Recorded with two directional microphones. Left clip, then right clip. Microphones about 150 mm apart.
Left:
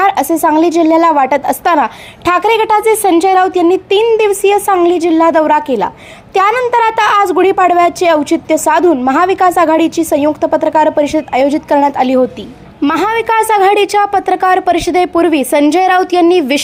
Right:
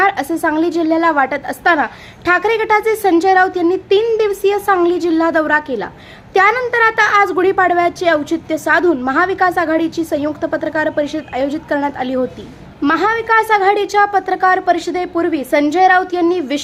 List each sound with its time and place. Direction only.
0.0 s a woman's voice: 30° left (ahead or behind)